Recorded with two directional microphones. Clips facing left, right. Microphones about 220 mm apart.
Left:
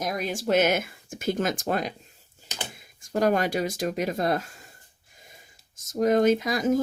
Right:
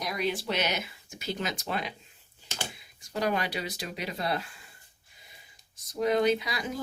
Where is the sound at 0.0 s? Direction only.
45° left (ahead or behind).